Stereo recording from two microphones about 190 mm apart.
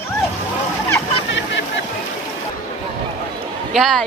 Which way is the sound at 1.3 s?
75° left (ahead or behind).